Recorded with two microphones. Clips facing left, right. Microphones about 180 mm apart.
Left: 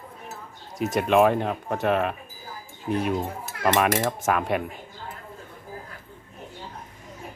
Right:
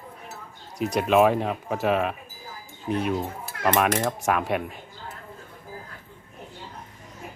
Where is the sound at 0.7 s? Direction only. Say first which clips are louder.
Even; centre (ahead or behind).